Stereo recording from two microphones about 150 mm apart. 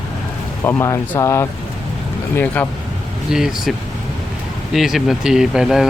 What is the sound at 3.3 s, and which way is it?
Speech, 5° right (ahead or behind).